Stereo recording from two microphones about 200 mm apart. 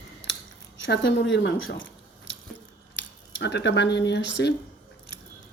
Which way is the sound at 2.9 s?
60° left (ahead or behind).